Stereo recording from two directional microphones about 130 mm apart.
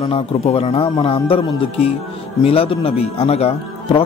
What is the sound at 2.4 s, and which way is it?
A man's voice, 50° left (ahead or behind).